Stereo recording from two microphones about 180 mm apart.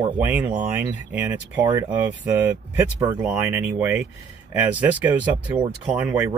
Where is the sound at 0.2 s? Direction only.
10° right (ahead or behind).